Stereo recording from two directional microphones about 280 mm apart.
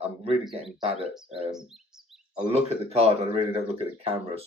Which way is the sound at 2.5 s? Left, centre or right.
Right.